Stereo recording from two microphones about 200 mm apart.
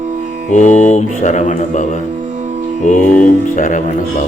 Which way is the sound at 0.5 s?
35° left (ahead or behind).